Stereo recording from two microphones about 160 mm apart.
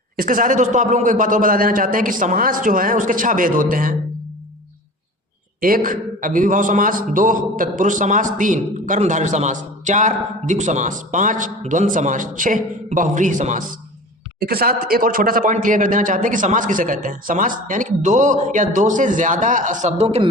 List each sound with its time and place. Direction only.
0.2 s a man's voice: 55° right (ahead or behind)
5.5 s a man's voice: 65° right (ahead or behind)
14.3 s a man's voice: 70° right (ahead or behind); by 20.2 s 40° right (ahead or behind)